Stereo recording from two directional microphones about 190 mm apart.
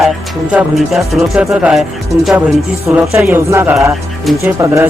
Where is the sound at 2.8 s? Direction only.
15° right (ahead or behind).